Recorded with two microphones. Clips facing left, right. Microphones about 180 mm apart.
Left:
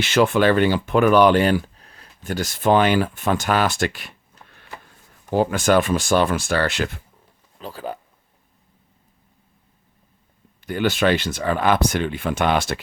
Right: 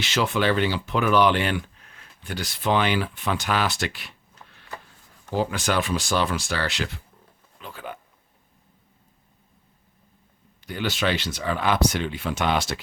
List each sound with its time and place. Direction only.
0.0 s speech: 55° left (ahead or behind)
7.6 s speech: 35° left (ahead or behind)
10.6 s speech: 50° left (ahead or behind)